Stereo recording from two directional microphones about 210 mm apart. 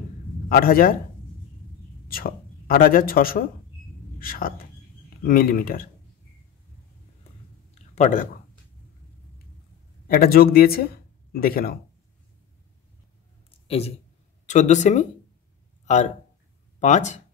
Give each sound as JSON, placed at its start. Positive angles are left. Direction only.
{"t": 0.5, "sound": "speech", "side_deg": 45}
{"t": 2.0, "sound": "speech", "side_deg": 45}
{"t": 7.9, "sound": "speech", "side_deg": 35}
{"t": 10.0, "sound": "speech", "side_deg": 45}
{"t": 13.7, "sound": "speech", "side_deg": 30}
{"t": 15.8, "sound": "a sound", "side_deg": 35}
{"t": 16.8, "sound": "speech", "side_deg": 35}